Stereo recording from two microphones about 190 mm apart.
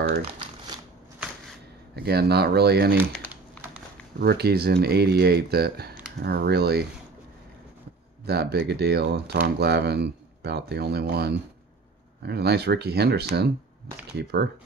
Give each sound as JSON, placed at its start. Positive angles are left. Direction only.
{"t": 2.0, "sound": "speech", "side_deg": -55}
{"t": 4.2, "sound": "speech", "side_deg": -55}
{"t": 8.3, "sound": "speech", "side_deg": -60}